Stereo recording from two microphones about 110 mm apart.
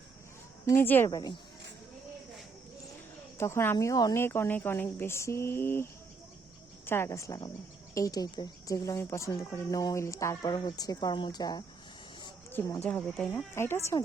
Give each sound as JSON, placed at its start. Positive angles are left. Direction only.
{"t": 0.6, "sound": "speech", "side_deg": 25}
{"t": 3.3, "sound": "speech", "side_deg": 25}
{"t": 12.5, "sound": "a sound", "side_deg": 20}
{"t": 12.8, "sound": "speech", "side_deg": 10}
{"t": 13.5, "sound": "speech", "side_deg": 25}